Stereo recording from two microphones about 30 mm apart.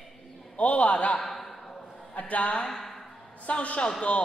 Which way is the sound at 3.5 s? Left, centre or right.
Left.